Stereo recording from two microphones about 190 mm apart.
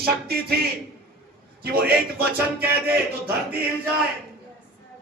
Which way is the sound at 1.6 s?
55° right (ahead or behind).